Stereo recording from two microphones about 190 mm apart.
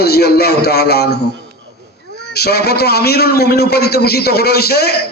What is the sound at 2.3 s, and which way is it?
A man's voice, 60° left (ahead or behind).